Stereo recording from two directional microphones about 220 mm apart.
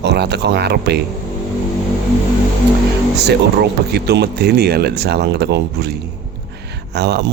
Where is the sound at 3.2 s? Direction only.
50° right (ahead or behind).